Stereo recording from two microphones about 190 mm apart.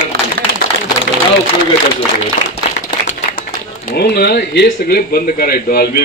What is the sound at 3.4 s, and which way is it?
A man's voice, 50° left (ahead or behind).